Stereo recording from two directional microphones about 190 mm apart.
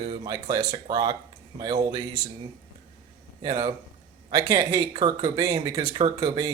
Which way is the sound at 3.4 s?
25° right (ahead or behind).